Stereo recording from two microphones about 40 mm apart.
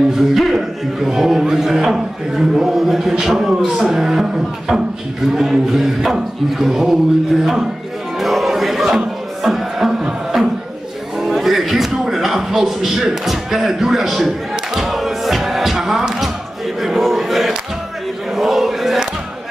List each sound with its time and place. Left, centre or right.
0.1 s speech: centre
8.2 s a sound: centre
8.8 s speech: centre
9.4 s music: centre
11.1 s a sound: centre
13.0 s speech: centre
14.7 s music: centre
16.8 s a sound: centre
18.3 s chant: centre